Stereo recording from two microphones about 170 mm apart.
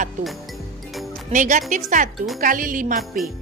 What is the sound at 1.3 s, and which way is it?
Speech, 45° right (ahead or behind).